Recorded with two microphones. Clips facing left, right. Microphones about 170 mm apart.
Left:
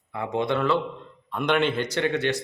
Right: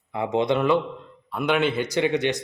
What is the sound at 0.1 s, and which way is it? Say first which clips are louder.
Speech: right 3 dB; 20° right (ahead or behind).